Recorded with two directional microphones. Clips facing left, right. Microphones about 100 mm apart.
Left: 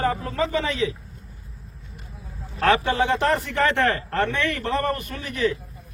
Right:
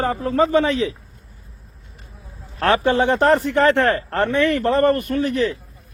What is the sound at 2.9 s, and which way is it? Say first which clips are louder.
A man's voice: right 5 dB; 40° right (ahead or behind).